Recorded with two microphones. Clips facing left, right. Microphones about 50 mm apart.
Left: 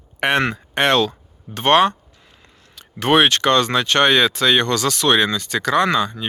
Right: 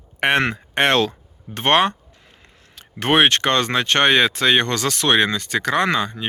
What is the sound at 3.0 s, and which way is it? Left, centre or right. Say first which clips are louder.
Speech: left 1 dB; right.